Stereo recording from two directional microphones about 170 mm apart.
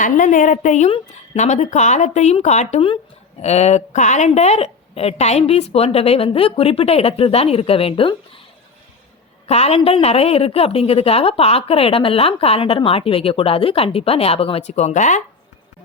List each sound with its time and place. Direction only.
0.0 s a woman's voice: 50° left (ahead or behind); by 8.1 s 35° left (ahead or behind)
9.5 s a woman's voice: 40° left (ahead or behind)